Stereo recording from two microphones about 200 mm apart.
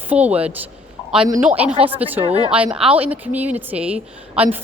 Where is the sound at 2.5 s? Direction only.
5° right (ahead or behind).